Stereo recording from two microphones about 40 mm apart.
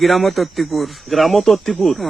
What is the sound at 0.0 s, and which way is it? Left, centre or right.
Speech, centre.